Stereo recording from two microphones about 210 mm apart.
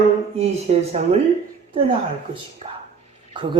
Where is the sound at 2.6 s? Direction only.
25° right (ahead or behind).